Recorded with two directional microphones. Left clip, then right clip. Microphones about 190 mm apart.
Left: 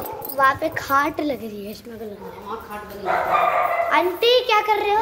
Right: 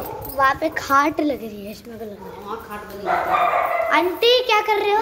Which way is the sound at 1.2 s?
Centre (ahead or behind).